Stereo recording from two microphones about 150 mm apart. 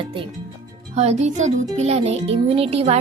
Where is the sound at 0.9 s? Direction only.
45° right (ahead or behind).